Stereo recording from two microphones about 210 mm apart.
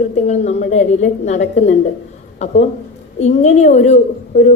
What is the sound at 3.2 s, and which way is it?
A woman's voice, 30° left (ahead or behind).